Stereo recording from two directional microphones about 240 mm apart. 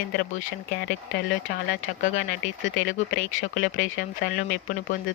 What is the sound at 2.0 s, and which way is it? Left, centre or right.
Speech, left.